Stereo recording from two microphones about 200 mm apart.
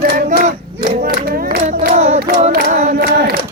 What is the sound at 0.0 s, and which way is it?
Crowd, 45° right (ahead or behind).